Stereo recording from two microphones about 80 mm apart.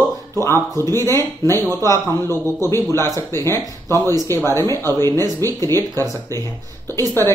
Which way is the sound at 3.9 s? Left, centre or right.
Right.